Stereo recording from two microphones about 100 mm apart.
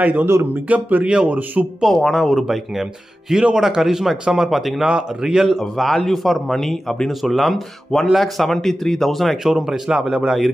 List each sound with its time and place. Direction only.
0.0 s a man's voice: 20° right (ahead or behind)
1.9 s speech: 5° left (ahead or behind)